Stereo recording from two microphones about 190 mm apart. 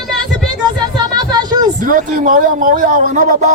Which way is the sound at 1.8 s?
45° right (ahead or behind).